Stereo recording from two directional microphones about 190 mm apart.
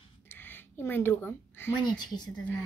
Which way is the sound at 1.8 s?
20° left (ahead or behind).